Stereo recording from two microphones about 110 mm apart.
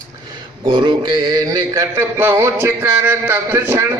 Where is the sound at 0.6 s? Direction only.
45° right (ahead or behind).